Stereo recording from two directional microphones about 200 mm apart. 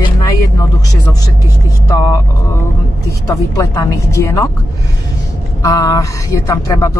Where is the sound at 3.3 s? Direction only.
15° left (ahead or behind).